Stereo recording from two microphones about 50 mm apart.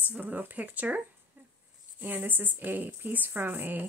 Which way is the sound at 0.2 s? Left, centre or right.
Right.